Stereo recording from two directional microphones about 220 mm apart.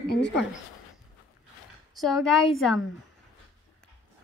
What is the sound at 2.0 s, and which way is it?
Speech, centre (ahead or behind).